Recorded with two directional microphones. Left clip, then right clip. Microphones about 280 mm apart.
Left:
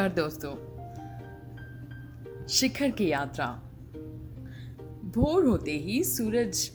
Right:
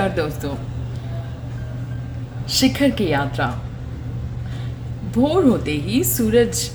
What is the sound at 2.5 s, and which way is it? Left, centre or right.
A woman's voice, left.